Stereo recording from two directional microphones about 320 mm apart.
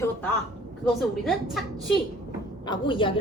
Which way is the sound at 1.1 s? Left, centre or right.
Centre.